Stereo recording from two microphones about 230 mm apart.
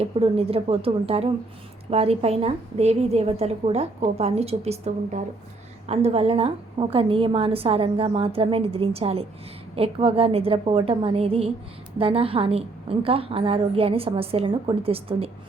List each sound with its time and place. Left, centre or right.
0.0 s a woman's voice: right